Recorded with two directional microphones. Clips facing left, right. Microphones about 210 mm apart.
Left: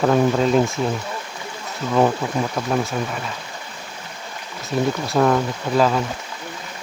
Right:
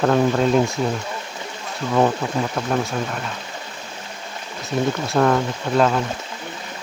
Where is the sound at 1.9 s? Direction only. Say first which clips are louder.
Left 1 dB; centre (ahead or behind).